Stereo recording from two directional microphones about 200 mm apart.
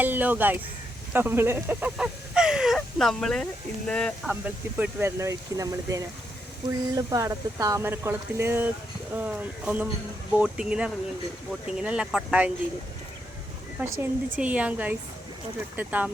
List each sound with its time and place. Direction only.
0.0 s speech: 10° right (ahead or behind)
4.4 s speech: 10° right (ahead or behind)
13.7 s speech: 10° right (ahead or behind)